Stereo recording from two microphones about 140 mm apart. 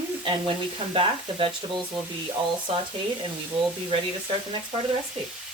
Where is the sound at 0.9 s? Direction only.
40° right (ahead or behind).